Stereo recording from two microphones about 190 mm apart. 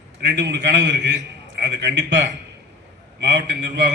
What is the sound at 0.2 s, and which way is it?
A man's voice, 65° right (ahead or behind).